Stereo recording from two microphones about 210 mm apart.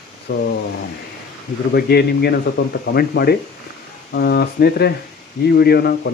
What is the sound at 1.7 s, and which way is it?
Speech, 50° left (ahead or behind).